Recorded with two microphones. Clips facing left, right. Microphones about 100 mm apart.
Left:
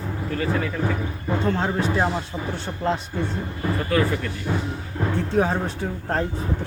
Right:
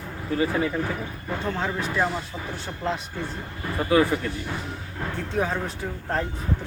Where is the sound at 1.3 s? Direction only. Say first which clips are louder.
Left 5 dB; 30° left (ahead or behind).